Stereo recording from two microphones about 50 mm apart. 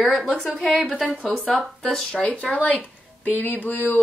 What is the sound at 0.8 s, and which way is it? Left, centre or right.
Speech, centre.